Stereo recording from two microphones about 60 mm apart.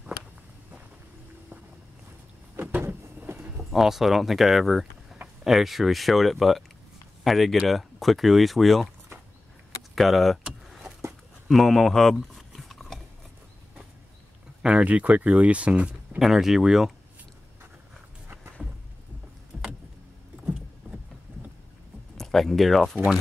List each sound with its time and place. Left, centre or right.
2.9 s vehicle: right
3.7 s speech: centre
9.9 s speech: centre
11.4 s a sound: centre
14.6 s speech: centre
16.2 s speech: centre
19.5 s vehicle: centre
22.1 s speech: centre